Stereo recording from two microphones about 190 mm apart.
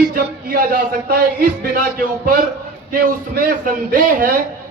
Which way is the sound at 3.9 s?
45° right (ahead or behind).